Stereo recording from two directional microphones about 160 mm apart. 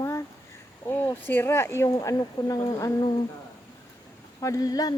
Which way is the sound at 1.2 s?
15° left (ahead or behind).